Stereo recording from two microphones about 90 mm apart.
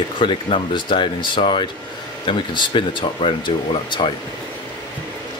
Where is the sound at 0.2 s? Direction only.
65° left (ahead or behind).